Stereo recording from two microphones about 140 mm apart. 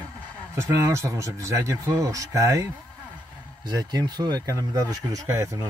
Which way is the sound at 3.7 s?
30° right (ahead or behind).